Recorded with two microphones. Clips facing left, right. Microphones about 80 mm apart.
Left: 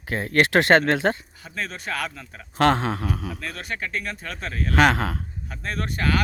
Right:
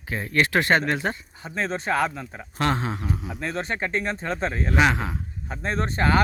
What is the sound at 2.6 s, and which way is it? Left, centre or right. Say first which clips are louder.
Speech: left 5 dB; left.